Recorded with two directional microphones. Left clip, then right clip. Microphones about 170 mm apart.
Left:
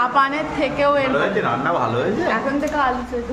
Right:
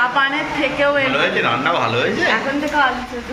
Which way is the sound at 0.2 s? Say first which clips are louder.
Right 1 dB; 60° left (ahead or behind).